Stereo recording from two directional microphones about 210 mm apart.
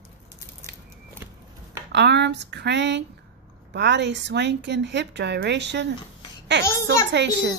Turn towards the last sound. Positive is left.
turn(degrees=-60)  # may be behind; listen again after turning